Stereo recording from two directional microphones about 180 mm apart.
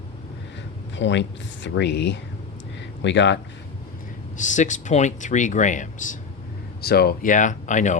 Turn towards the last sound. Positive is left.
turn(degrees=45)  # may be behind; listen again after turning